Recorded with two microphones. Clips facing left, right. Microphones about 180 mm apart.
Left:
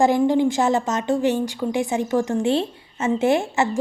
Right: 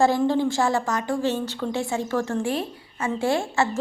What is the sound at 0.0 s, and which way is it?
A woman's voice, 15° left (ahead or behind).